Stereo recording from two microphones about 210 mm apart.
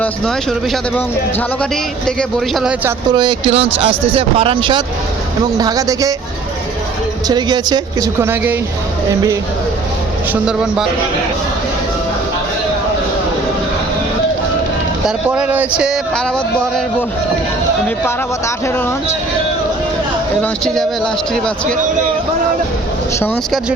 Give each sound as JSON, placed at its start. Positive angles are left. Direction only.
{"t": 0.0, "sound": "speech", "side_deg": 5}
{"t": 3.1, "sound": "speech", "side_deg": -20}
{"t": 7.3, "sound": "speech", "side_deg": -20}
{"t": 10.4, "sound": "speech", "side_deg": -5}
{"t": 15.0, "sound": "speech", "side_deg": -5}
{"t": 17.8, "sound": "speech", "side_deg": 10}
{"t": 20.4, "sound": "speech", "side_deg": 5}
{"t": 23.2, "sound": "speech", "side_deg": 5}